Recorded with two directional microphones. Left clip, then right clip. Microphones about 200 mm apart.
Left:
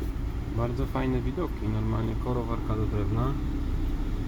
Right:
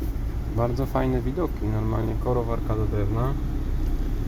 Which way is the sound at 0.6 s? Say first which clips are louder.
Right 6 dB; 25° right (ahead or behind).